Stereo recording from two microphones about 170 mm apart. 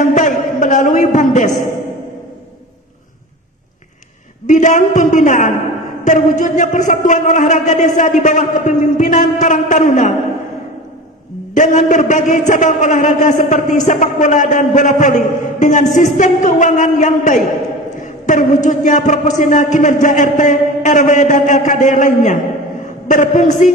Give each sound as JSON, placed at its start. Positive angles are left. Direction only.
{"t": 0.0, "sound": "a sound", "side_deg": 50}
{"t": 4.5, "sound": "a man's voice", "side_deg": 50}
{"t": 11.5, "sound": "a man's voice", "side_deg": 45}